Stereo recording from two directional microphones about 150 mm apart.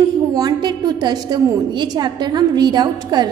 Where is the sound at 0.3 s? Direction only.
25° right (ahead or behind).